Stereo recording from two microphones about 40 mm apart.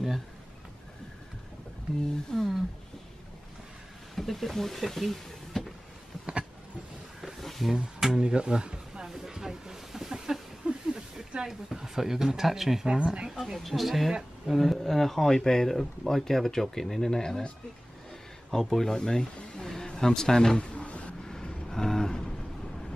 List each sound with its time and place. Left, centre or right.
2.3 s speech: centre
4.1 s speech: centre
6.1 s a sound: centre
7.3 s a sound: centre
7.7 s speech: centre
9.1 s snake: centre
10.6 s a sound: right
11.4 s speech: centre
12.8 s speech: right
13.6 s speech: centre
18.5 s speech: centre
18.9 s speech: centre
19.7 s a sound: centre; by 21.1 s left
21.2 s vehicle: centre